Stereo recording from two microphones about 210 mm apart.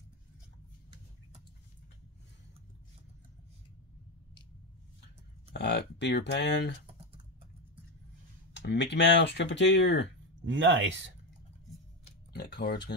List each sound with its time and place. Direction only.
5.5 s speech: 55° left (ahead or behind)
8.5 s speech: 55° left (ahead or behind)
10.4 s speech: 60° right (ahead or behind)
12.3 s speech: 50° left (ahead or behind)